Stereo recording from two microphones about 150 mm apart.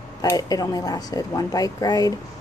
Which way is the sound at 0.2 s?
25° left (ahead or behind).